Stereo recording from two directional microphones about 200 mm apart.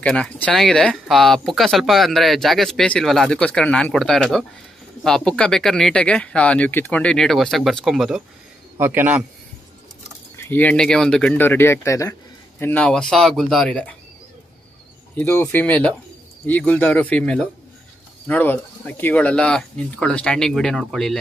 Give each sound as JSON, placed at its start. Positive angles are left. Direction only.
{"t": 0.0, "sound": "speech", "side_deg": 5}
{"t": 8.7, "sound": "a man's voice", "side_deg": -10}
{"t": 10.3, "sound": "speech", "side_deg": 10}
{"t": 15.1, "sound": "speech", "side_deg": 10}